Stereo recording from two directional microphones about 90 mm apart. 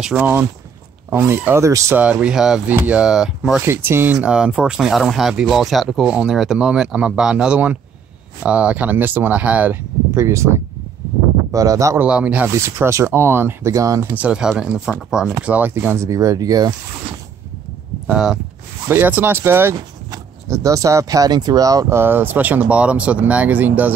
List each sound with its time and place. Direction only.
0.2 s speech: 20° right (ahead or behind)
2.0 s speech: 15° right (ahead or behind)
2.6 s speech: 20° right (ahead or behind)
3.6 s speech: 25° right (ahead or behind)
10.1 s speech: 30° right (ahead or behind)
12.0 s speech: 10° right (ahead or behind)
12.4 s speech: 30° right (ahead or behind)
14.1 s speech: 15° right (ahead or behind)
16.1 s speech: 35° right (ahead or behind)
18.0 s speech: 10° right (ahead or behind)
18.9 s speech: 20° right (ahead or behind); by 21.9 s 40° right (ahead or behind)
21.9 s speech: 25° right (ahead or behind)